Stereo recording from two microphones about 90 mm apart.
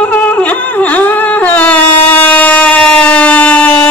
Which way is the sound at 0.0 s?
20° left (ahead or behind).